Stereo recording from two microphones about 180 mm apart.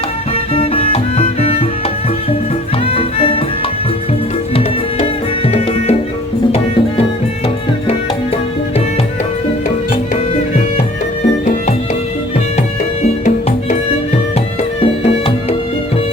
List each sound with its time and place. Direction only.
0.5 s music: 30° left (ahead or behind)
2.8 s music: 30° left (ahead or behind)
5.5 s music: 35° left (ahead or behind)
14.8 s music: 35° left (ahead or behind)